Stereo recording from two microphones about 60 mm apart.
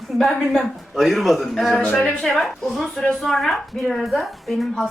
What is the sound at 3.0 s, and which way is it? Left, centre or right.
Speech, centre.